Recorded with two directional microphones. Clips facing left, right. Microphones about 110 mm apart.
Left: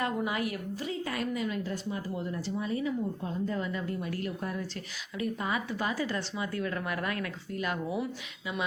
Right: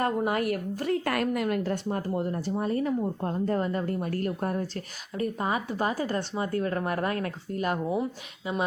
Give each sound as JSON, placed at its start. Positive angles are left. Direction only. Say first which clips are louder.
{"t": 0.0, "sound": "a woman's voice", "louder": "right 5 dB", "side_deg": -45}